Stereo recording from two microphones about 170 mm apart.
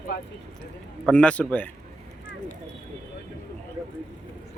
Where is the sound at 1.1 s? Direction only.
10° left (ahead or behind).